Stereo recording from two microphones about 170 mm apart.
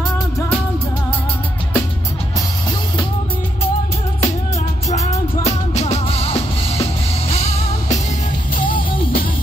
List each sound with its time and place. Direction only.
4.8 s music: 40° left (ahead or behind)
8.5 s music: 55° left (ahead or behind)